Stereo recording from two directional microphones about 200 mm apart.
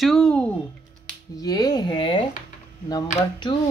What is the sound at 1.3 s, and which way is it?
Speech, 20° left (ahead or behind).